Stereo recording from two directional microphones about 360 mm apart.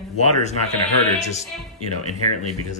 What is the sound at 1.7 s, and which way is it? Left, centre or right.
Speech, left.